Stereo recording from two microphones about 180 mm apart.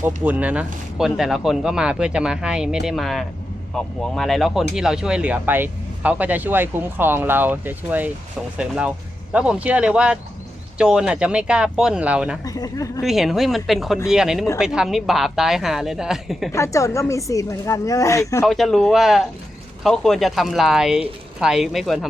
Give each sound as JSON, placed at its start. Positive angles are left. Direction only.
{"t": 0.0, "sound": "speech", "side_deg": -10}
{"t": 12.5, "sound": "speech", "side_deg": 20}
{"t": 13.0, "sound": "speech", "side_deg": 0}
{"t": 16.5, "sound": "speech", "side_deg": 15}
{"t": 18.4, "sound": "speech", "side_deg": 0}